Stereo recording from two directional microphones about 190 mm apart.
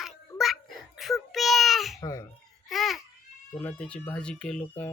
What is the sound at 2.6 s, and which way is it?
Babbling, centre (ahead or behind).